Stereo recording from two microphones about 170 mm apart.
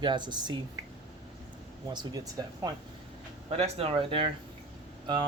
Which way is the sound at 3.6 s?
35° right (ahead or behind).